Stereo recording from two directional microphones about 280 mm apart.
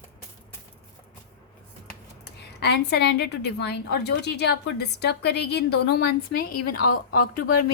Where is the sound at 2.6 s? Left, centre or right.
Left.